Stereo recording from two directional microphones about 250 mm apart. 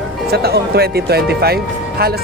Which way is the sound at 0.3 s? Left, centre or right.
Right.